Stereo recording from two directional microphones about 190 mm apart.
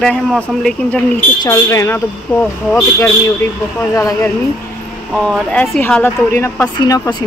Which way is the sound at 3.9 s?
15° left (ahead or behind).